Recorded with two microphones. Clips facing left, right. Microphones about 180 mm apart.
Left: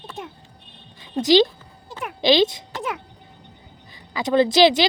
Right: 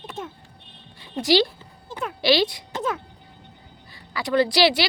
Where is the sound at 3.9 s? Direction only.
20° left (ahead or behind).